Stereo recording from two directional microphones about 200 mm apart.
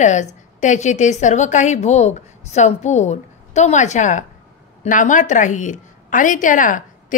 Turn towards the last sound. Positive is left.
turn(degrees=40)  # may be behind; listen again after turning